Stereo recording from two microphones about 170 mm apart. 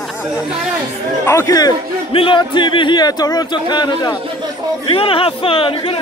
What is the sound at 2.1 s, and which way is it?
Speech, 30° left (ahead or behind).